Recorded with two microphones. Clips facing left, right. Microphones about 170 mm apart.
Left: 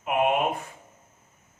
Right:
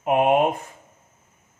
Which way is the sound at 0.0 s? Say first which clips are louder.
Right 5 dB; 45° right (ahead or behind).